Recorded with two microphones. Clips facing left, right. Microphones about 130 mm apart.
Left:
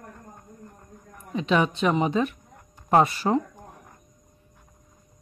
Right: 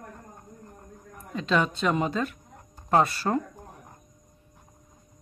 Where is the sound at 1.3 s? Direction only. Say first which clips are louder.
Left 3 dB; 15° left (ahead or behind).